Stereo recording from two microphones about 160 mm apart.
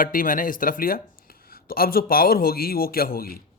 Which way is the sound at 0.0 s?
60° left (ahead or behind).